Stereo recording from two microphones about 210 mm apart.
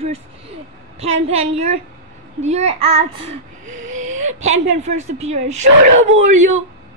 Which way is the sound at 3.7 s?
70° right (ahead or behind).